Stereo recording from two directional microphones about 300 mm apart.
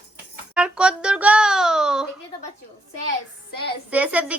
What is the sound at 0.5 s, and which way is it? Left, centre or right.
Child singing, centre.